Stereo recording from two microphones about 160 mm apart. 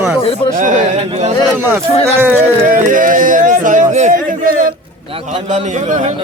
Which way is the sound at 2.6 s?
55° right (ahead or behind).